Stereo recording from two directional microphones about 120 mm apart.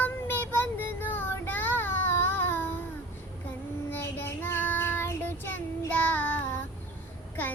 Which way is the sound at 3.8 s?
20° left (ahead or behind).